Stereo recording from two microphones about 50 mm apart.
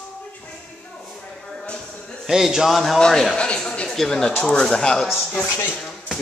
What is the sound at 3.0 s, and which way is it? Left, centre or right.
Speech, centre.